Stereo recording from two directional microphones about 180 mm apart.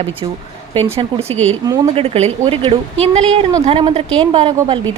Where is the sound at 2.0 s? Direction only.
35° right (ahead or behind).